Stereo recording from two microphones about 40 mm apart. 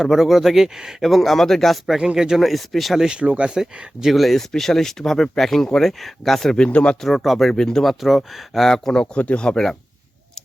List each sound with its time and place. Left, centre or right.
0.0 s speech: centre
1.0 s speech: centre
2.0 s speech: centre
2.4 s speech: centre
3.1 s speech: right
4.0 s speech: centre
6.7 s speech: left
7.2 s speech: centre
7.5 s speech: centre
8.0 s speech: centre
8.6 s speech: centre
9.1 s speech: left
9.5 s speech: centre